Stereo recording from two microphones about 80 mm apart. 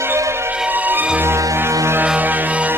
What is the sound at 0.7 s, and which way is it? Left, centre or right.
Music, right.